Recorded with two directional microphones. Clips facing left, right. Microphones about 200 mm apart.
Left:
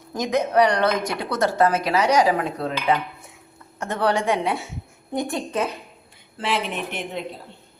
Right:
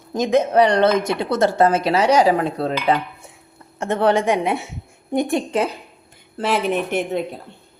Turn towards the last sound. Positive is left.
turn(degrees=-45)  # may be behind; listen again after turning